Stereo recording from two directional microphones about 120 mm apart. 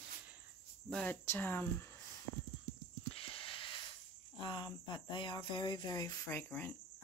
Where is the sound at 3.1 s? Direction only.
50° left (ahead or behind).